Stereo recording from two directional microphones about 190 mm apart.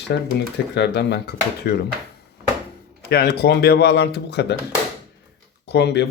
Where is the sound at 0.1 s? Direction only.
65° left (ahead or behind).